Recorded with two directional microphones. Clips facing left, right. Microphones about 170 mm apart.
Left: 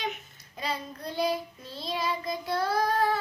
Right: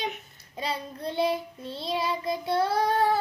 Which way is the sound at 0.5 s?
30° right (ahead or behind).